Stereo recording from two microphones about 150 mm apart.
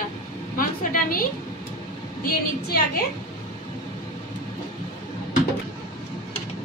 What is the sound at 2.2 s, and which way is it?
Speech, 85° left.